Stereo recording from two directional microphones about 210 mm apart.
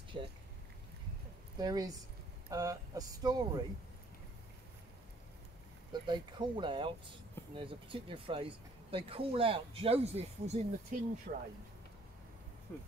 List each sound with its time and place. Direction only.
0.1 s a sound: 25° right (ahead or behind)
1.6 s speech: 20° right (ahead or behind)
5.9 s speech: 20° right (ahead or behind); by 11.4 s 40° right (ahead or behind)
12.7 s speech: 15° left (ahead or behind)